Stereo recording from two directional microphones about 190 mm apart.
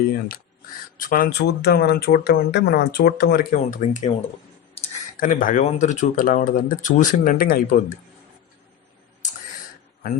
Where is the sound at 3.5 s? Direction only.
40° left (ahead or behind).